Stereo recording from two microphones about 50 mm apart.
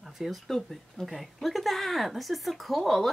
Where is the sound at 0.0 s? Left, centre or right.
Centre.